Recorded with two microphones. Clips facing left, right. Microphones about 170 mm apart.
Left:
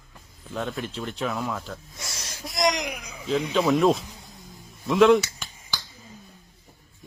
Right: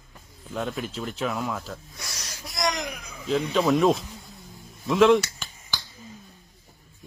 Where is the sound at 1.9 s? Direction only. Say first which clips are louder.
Left 1 dB; 25° left (ahead or behind).